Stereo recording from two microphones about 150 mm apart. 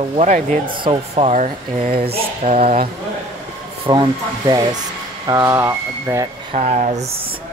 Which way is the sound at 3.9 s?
30° right (ahead or behind).